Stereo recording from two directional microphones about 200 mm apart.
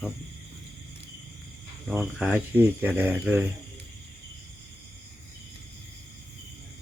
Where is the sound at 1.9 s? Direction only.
5° right (ahead or behind).